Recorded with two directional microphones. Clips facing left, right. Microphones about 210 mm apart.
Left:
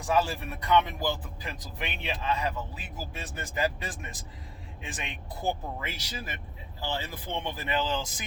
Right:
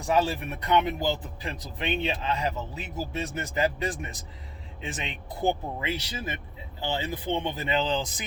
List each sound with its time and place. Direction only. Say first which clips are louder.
0.1 s speech: right 2 dB; 20° right (ahead or behind)